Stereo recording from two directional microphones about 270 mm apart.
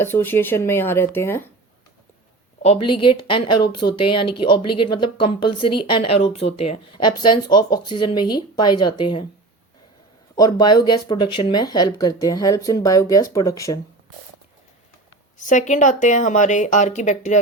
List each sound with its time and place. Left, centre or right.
0.0 s speech: centre
2.8 s speech: centre
10.3 s speech: centre
15.4 s speech: left